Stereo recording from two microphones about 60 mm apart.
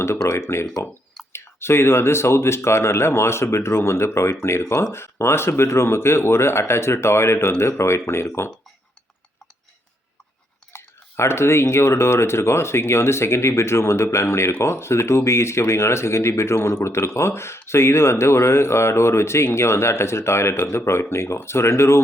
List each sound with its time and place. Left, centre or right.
0.3 s speech: left
10.7 s speech: left